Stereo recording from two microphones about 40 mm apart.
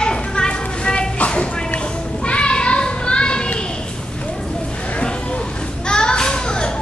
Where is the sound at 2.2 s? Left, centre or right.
Left.